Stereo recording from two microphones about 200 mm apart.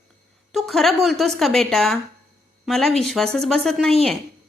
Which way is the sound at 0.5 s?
Centre (ahead or behind).